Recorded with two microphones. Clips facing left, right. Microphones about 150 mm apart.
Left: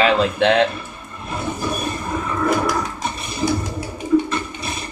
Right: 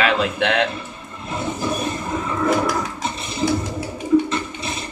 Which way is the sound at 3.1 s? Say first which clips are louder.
Right 1 dB; 25° right (ahead or behind).